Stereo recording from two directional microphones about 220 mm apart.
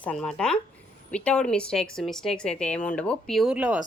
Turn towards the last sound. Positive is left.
turn(degrees=-5)  # may be behind; listen again after turning